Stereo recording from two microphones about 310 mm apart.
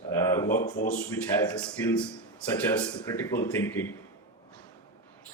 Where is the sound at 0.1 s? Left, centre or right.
Centre.